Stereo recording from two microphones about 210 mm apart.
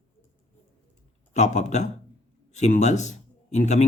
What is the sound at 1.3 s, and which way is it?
A man's voice, 35° left (ahead or behind).